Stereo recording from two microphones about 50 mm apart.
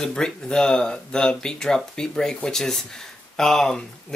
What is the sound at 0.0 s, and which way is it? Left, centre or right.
Speech, centre.